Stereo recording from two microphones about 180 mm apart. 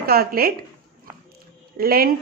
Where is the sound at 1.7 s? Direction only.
55° right (ahead or behind).